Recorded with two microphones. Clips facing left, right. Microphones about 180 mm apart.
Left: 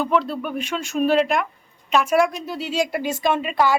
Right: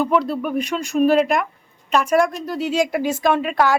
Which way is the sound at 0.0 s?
5° right (ahead or behind).